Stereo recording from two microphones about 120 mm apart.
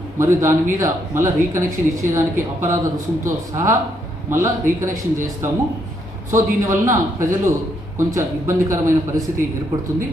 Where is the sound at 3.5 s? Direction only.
25° right (ahead or behind).